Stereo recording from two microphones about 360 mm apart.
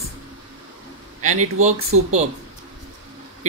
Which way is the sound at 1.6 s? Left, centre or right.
Centre.